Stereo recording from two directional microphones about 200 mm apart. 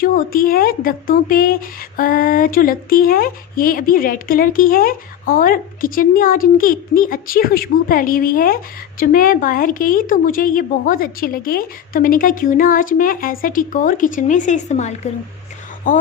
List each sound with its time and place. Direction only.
0.0 s speech: 45° left (ahead or behind)